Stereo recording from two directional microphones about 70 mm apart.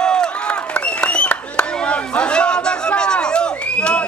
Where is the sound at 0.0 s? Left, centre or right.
Centre.